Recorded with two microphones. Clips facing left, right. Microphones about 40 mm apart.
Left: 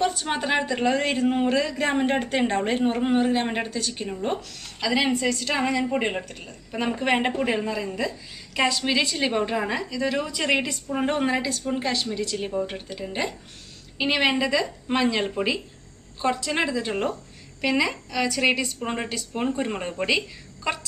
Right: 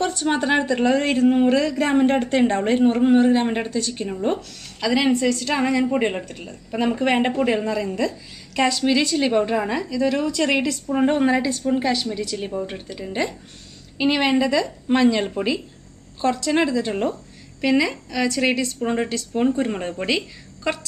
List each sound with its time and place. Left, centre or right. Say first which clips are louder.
0.4 s a woman's voice: right 3 dB; centre
2.0 s a woman's voice: right 5 dB; centre
5.1 s a woman's voice: right 4 dB; centre
5.5 s a woman's voice: right 3 dB; centre
16.3 s a woman's voice: right 3 dB; left
16.5 s a woman's voice: right 4 dB; centre